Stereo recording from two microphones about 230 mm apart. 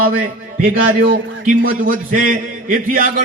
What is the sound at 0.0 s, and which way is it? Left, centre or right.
A man's voice, right.